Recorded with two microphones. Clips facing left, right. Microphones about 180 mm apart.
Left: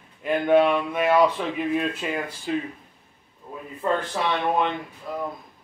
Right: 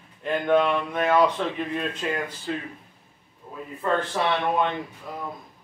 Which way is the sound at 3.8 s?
15° left (ahead or behind).